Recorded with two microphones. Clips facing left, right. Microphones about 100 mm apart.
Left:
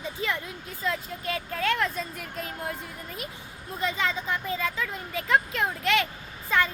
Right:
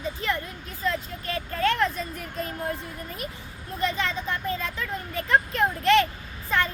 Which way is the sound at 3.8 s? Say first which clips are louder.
Right 1 dB; 10° left (ahead or behind).